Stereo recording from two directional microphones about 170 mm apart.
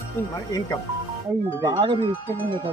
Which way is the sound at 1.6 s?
25° right (ahead or behind).